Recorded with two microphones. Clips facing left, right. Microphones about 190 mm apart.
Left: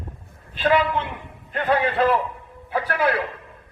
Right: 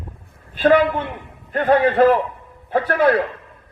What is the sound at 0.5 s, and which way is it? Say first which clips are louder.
A man's voice: right 5 dB; 45° right (ahead or behind).